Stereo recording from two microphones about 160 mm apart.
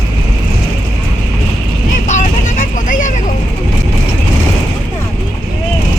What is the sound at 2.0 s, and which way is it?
Vehicle, 50° left (ahead or behind).